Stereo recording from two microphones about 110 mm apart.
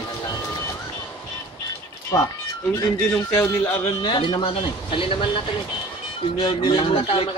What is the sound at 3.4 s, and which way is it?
Speech, 20° left (ahead or behind).